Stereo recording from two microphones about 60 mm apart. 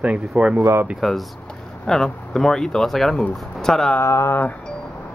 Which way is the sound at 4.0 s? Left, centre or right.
Left.